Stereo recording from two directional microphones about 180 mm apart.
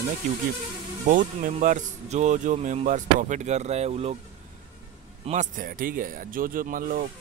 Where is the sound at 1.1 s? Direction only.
45° right (ahead or behind).